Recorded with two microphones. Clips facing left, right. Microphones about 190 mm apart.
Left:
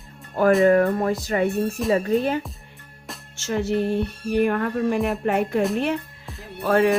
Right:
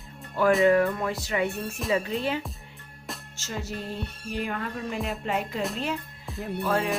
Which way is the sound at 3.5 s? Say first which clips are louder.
Left 12 dB; 65° left (ahead or behind).